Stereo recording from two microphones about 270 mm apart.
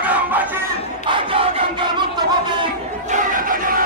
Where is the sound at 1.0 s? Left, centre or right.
Centre.